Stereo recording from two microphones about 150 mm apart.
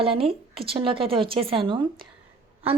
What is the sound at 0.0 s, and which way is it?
A woman's voice, 40° right (ahead or behind).